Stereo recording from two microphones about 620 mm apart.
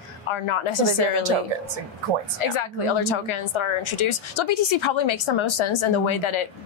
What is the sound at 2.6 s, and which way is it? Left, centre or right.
A woman's voice, left.